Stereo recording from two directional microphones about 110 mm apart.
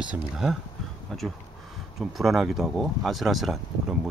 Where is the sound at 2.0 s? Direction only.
Centre (ahead or behind).